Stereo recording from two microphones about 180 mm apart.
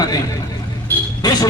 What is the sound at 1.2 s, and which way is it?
Speech, 20° left (ahead or behind).